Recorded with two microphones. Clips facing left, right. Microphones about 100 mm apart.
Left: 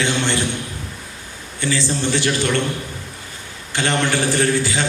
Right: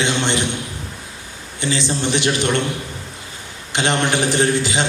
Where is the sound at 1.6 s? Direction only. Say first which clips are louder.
Even; 20° right (ahead or behind).